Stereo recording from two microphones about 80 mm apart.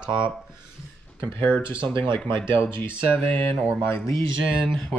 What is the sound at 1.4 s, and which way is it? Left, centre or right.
Speech, left.